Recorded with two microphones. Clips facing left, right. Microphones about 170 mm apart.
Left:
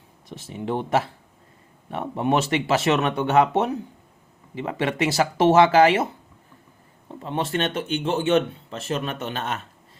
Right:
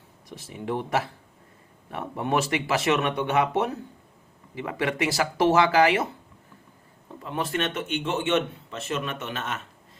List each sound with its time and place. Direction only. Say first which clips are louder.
0.3 s speech: left 3 dB; 25° left (ahead or behind)
7.2 s speech: left 3 dB; 25° left (ahead or behind)